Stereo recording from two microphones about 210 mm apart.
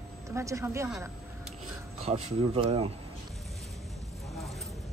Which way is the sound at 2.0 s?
30° right (ahead or behind).